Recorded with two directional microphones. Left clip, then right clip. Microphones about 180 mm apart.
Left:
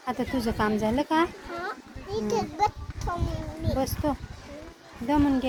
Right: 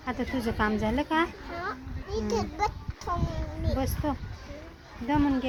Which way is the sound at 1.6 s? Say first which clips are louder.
Right 1 dB; 5° left (ahead or behind).